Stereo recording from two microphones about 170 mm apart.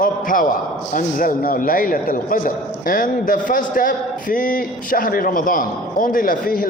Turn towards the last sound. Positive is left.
turn(degrees=55)  # may be behind; listen again after turning